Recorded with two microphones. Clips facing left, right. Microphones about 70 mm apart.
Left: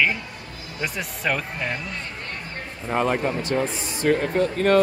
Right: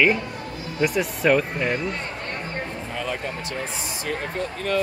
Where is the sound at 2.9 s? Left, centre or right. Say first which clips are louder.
Left 9 dB; left.